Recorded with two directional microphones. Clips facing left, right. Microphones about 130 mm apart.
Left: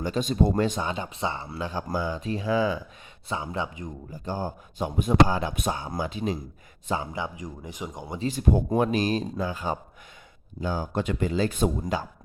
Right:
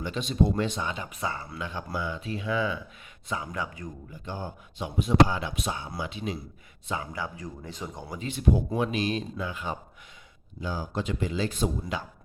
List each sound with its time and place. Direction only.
0.0 s speech: 45° left (ahead or behind); by 3.9 s 25° left (ahead or behind)
4.1 s speech: 40° left (ahead or behind)
6.8 s speech: 30° left (ahead or behind)
8.2 s speech: 40° left (ahead or behind)
10.6 s speech: 50° left (ahead or behind)